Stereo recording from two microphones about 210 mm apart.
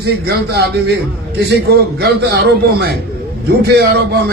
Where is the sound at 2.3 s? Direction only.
50° right (ahead or behind).